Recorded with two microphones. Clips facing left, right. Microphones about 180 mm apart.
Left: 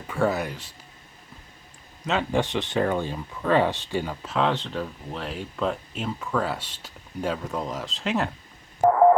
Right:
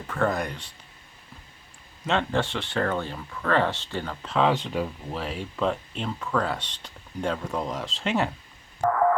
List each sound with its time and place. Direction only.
0.1 s speech: 10° left (ahead or behind)
2.0 s speech: 5° left (ahead or behind)
2.4 s speech: 15° left (ahead or behind); by 4.5 s centre (ahead or behind)
4.5 s speech: 10° right (ahead or behind)
8.8 s radio: 30° left (ahead or behind)